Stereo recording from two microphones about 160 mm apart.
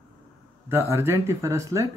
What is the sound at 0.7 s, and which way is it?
Speech, 15° right (ahead or behind).